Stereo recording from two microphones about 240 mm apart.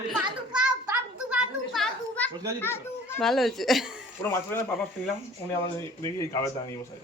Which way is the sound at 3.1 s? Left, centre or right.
Centre.